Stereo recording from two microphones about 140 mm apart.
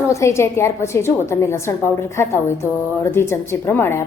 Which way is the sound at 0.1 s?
20° left (ahead or behind).